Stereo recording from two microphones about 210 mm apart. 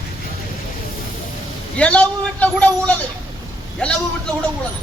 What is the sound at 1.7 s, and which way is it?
A man's voice, 5° left (ahead or behind).